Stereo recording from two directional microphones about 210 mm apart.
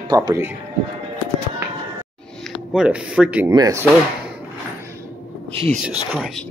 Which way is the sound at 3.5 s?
15° right (ahead or behind).